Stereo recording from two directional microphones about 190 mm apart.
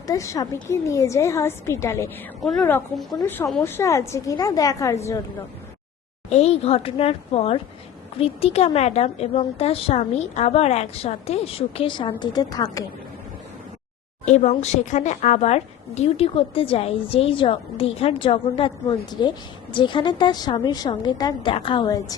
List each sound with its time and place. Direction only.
0.1 s a woman's voice: 15° left (ahead or behind)
6.3 s a woman's voice: 35° left (ahead or behind)
14.3 s a woman's voice: 35° left (ahead or behind); by 22.0 s 20° left (ahead or behind)